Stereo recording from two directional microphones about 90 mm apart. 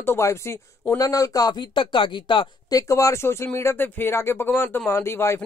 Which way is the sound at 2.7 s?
35° left (ahead or behind).